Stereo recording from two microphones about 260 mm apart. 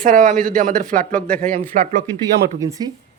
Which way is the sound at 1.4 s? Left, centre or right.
Right.